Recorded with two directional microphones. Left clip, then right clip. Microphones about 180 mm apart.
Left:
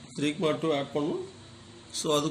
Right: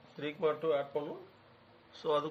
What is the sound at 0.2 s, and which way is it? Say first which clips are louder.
Speech: left 5 dB; 40° right (ahead or behind).